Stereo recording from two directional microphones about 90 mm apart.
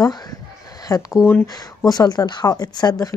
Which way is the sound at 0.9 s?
35° left (ahead or behind).